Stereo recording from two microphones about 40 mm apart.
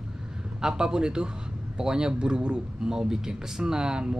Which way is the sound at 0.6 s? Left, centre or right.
Centre.